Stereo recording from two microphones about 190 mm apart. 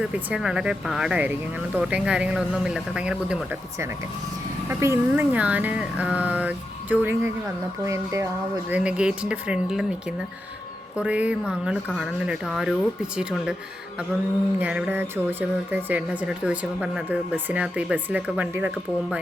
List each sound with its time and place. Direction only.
0.0 s speech: 5° right (ahead or behind)
4.7 s speech: 15° right (ahead or behind)
8.7 s speech: 5° right (ahead or behind)
10.9 s speech: 5° right (ahead or behind)
14.6 s speech: 5° right (ahead or behind)